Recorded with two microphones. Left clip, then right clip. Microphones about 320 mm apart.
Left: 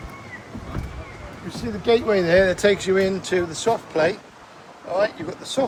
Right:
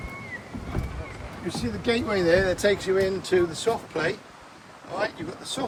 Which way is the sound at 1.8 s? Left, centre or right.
Centre.